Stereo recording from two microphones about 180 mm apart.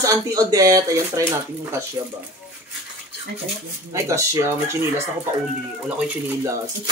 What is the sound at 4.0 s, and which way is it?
Speech, 15° right (ahead or behind).